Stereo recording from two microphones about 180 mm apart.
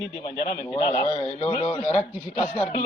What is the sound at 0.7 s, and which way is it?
A man's voice, 30° left (ahead or behind).